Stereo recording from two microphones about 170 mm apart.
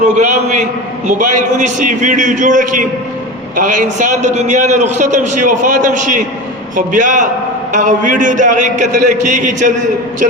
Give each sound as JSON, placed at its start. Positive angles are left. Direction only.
{"t": 0.0, "sound": "a man's voice", "side_deg": -45}